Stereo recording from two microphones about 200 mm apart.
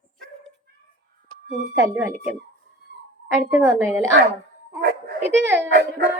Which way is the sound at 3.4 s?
10° right (ahead or behind).